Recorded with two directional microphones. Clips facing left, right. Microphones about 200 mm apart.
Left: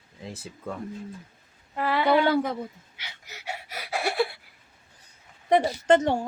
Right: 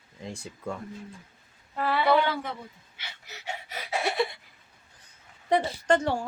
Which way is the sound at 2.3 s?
40° left (ahead or behind).